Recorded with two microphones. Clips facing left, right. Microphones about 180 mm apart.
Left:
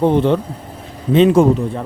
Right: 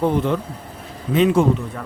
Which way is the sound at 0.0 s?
25° left (ahead or behind).